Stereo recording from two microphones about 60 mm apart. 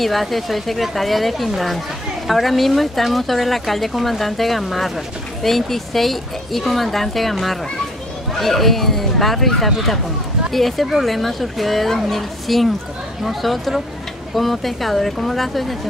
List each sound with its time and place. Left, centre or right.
0.0 s speech: centre